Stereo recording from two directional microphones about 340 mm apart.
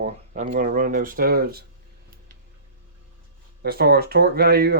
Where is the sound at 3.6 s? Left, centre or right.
Right.